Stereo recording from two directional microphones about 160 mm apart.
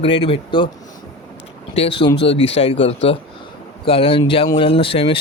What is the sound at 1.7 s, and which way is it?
Speech, 35° left (ahead or behind).